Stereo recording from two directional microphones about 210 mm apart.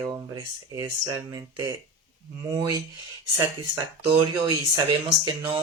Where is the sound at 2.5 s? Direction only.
20° right (ahead or behind).